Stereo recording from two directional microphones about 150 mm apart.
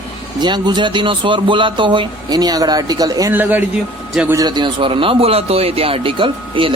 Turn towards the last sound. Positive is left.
turn(degrees=-35)  # may be behind; listen again after turning